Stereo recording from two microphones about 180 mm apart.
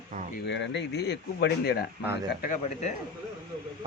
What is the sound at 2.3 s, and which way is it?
Speech, 50° left (ahead or behind).